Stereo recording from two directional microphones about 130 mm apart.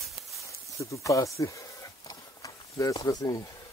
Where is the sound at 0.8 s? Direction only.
25° left (ahead or behind).